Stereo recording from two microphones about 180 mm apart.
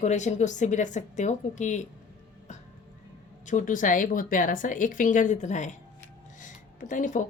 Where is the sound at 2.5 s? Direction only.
40° left (ahead or behind).